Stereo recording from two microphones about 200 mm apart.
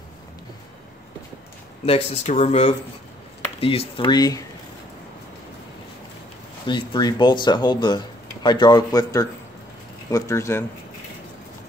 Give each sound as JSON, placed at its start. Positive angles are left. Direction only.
{"t": 1.9, "sound": "speech", "side_deg": 30}
{"t": 6.7, "sound": "speech", "side_deg": 20}